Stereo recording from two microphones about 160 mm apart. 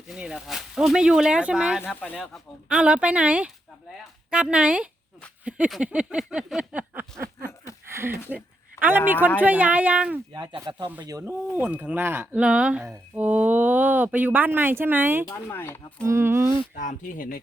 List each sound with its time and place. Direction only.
0.1 s speech: 5° right (ahead or behind)
1.9 s speech: 10° left (ahead or behind)
2.2 s speech: 5° right (ahead or behind)
7.9 s a sound: 15° right (ahead or behind)
8.3 s a woman's voice: 10° right (ahead or behind)
10.3 s speech: 25° right (ahead or behind)
11.0 s speech: 20° right (ahead or behind)
15.3 s speech: 15° left (ahead or behind)
16.0 s speech: 15° right (ahead or behind)
16.7 s speech: 55° left (ahead or behind)